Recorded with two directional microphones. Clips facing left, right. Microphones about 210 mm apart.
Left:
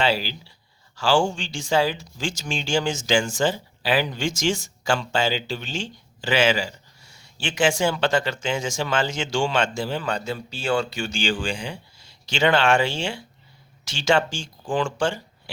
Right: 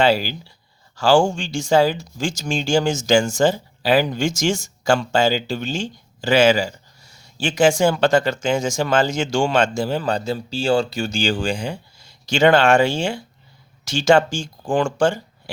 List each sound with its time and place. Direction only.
0.0 s speech: 45° right (ahead or behind)